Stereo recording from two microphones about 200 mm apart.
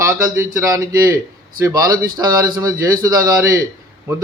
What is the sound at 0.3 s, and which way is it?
A man's voice, 15° right (ahead or behind).